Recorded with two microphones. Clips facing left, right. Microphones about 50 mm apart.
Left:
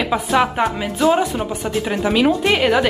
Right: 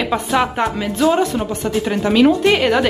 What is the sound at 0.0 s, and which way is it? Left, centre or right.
Speech, centre.